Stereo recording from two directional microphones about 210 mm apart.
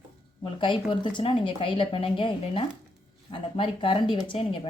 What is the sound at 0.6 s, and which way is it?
Speech, 25° left (ahead or behind).